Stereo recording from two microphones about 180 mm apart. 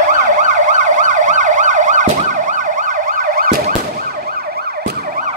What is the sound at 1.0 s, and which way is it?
Emergency vehicle, 45° right (ahead or behind).